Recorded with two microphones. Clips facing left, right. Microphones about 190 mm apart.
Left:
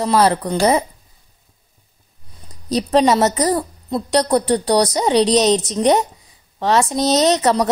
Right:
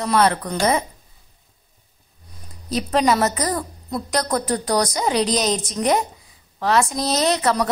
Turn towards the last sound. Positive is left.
turn(degrees=35)  # may be behind; listen again after turning